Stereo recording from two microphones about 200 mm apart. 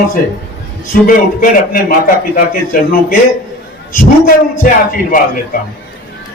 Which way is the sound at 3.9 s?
40° left (ahead or behind).